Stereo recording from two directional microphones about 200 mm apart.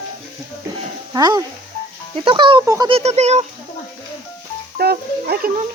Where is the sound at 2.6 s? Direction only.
15° right (ahead or behind).